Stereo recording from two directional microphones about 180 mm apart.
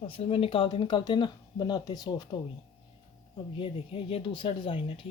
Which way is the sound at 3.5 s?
30° left (ahead or behind).